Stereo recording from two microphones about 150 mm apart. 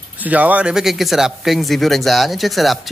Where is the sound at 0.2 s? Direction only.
10° right (ahead or behind).